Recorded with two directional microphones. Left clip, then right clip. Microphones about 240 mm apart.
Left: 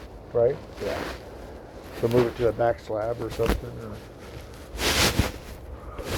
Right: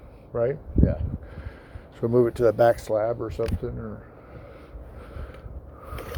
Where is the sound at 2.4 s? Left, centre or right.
Right.